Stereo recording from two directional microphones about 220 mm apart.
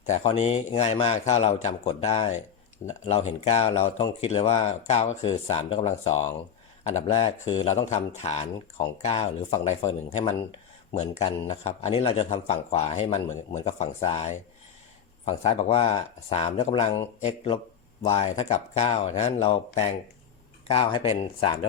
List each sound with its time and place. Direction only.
0.0 s speech: 30° left (ahead or behind)